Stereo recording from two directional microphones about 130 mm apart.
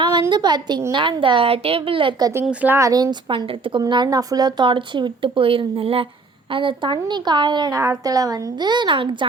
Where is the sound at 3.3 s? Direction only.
40° right (ahead or behind).